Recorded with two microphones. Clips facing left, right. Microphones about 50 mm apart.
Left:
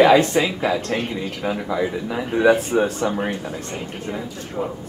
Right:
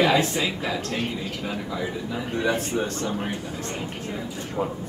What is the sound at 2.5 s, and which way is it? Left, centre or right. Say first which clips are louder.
Speech: left 9 dB; centre.